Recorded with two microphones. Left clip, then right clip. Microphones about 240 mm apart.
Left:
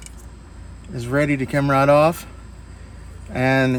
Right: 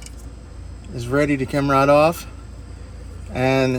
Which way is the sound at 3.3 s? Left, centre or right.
Left.